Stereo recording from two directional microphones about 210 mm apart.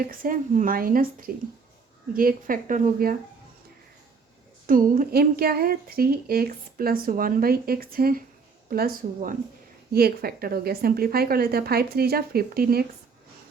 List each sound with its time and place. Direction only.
0.0 s a woman's voice: 40° right (ahead or behind)
4.6 s a woman's voice: 40° right (ahead or behind)